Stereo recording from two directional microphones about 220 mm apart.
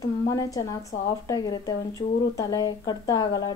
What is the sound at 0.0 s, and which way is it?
A woman's voice, 15° left (ahead or behind).